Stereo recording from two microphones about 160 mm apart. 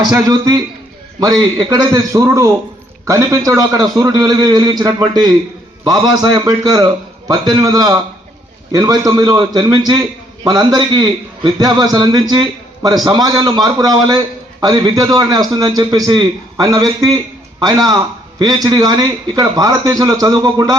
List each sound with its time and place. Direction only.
0.3 s a man's voice: 20° right (ahead or behind)